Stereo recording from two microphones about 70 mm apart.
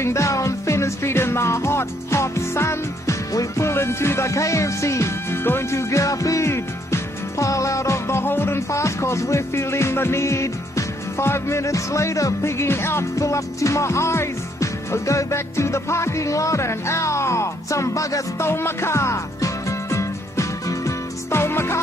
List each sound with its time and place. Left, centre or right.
0.0 s music: left
13.2 s music: left
18.5 s music: left